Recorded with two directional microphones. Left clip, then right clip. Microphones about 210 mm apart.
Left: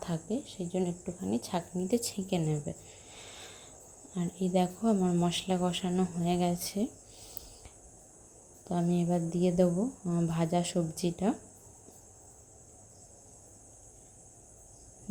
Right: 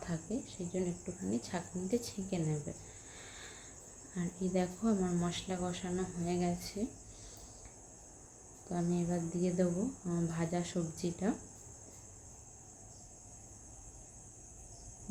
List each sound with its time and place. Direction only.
0.0 s speech: 30° left (ahead or behind)
3.2 s a sound: 25° left (ahead or behind)
4.1 s speech: 30° left (ahead or behind)
8.7 s speech: 35° left (ahead or behind)